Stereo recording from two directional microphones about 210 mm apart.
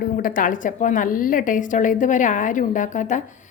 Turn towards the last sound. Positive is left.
turn(degrees=35)  # may be behind; listen again after turning